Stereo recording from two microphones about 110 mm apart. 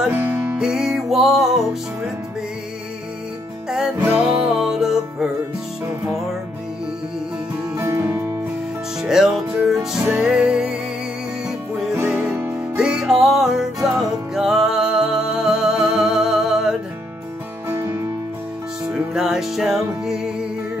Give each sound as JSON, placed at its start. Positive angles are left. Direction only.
{"t": 0.1, "sound": "music", "side_deg": -20}
{"t": 0.6, "sound": "music", "side_deg": -5}
{"t": 4.0, "sound": "music", "side_deg": -20}
{"t": 4.5, "sound": "music", "side_deg": -5}
{"t": 7.7, "sound": "music", "side_deg": -25}
{"t": 9.0, "sound": "music", "side_deg": -5}
{"t": 17.6, "sound": "music", "side_deg": -25}
{"t": 18.9, "sound": "music", "side_deg": -5}